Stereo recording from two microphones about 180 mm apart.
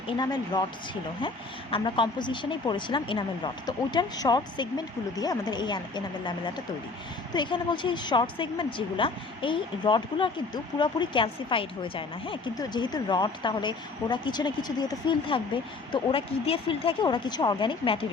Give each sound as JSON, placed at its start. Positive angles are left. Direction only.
{"t": 0.2, "sound": "a woman's voice", "side_deg": 20}
{"t": 1.7, "sound": "a woman's voice", "side_deg": 25}